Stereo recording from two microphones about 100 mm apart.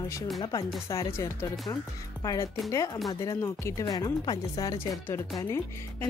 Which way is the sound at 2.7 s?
35° left (ahead or behind).